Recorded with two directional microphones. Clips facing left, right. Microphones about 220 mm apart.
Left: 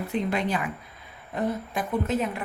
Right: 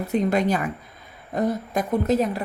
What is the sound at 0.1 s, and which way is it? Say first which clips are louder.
A woman's voice: right 6 dB; 45° right (ahead or behind).